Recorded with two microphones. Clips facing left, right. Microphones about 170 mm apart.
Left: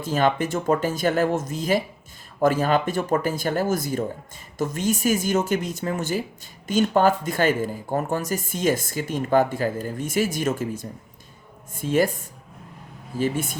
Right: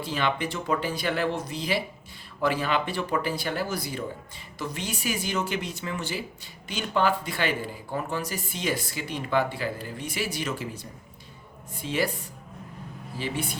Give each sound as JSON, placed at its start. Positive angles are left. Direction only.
{"t": 0.0, "sound": "speech", "side_deg": 45}